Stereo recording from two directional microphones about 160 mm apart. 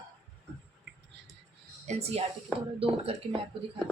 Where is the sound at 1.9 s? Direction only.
40° right (ahead or behind).